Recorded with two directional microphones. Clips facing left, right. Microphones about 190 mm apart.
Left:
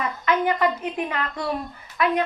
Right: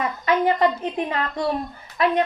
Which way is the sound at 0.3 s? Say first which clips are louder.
Right 2 dB; 25° right (ahead or behind).